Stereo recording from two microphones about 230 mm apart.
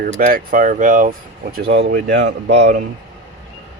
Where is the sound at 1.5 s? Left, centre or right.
Right.